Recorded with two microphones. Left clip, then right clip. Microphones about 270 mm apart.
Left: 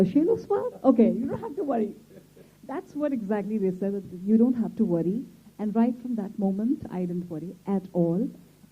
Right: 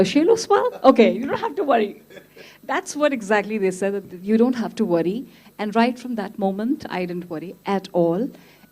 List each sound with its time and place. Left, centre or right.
0.0 s a woman's voice: centre
7.9 s speech: right